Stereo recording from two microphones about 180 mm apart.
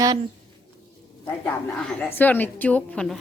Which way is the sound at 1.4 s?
5° left (ahead or behind).